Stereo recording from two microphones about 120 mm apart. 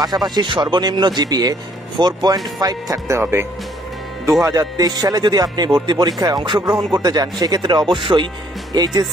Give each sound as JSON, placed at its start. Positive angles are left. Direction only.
{"t": 0.0, "sound": "speech", "side_deg": -35}